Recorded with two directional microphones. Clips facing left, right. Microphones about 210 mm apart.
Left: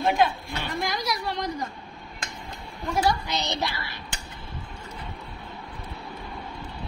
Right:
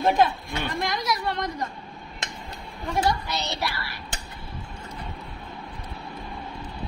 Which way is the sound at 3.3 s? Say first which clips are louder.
Left 1 dB; 20° left (ahead or behind).